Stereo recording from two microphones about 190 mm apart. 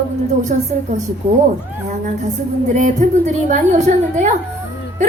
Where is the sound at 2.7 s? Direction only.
40° right (ahead or behind).